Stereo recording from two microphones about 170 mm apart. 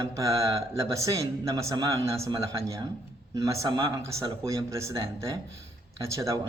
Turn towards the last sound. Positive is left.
turn(degrees=-20)  # may be behind; listen again after turning